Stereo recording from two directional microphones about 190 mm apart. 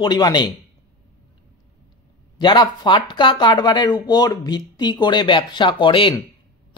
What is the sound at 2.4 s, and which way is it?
Speech, 25° left (ahead or behind).